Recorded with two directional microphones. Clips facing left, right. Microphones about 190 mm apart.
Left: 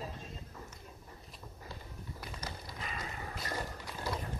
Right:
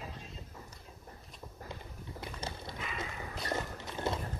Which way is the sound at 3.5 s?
25° right (ahead or behind).